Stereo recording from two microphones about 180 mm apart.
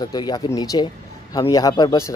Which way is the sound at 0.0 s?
20° left (ahead or behind).